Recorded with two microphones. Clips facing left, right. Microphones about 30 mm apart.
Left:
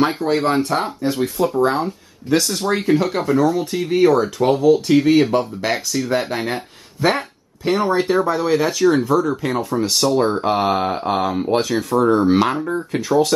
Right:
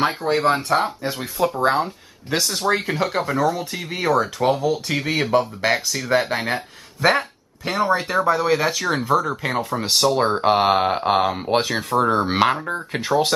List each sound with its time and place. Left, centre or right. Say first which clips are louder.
0.0 s speech: left 1 dB; centre; by 13.0 s right